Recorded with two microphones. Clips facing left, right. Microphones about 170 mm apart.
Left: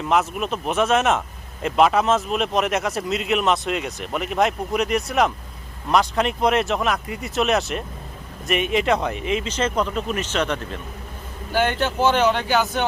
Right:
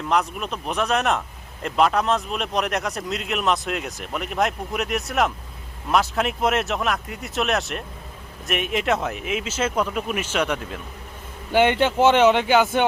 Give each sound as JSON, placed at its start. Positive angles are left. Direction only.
{"t": 0.1, "sound": "speech", "side_deg": 5}
{"t": 11.5, "sound": "speech", "side_deg": -25}